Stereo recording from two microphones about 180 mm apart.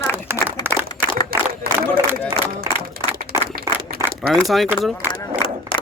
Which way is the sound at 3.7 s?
15° right (ahead or behind).